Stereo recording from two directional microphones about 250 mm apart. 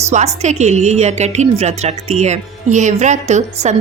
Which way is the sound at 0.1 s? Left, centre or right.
Right.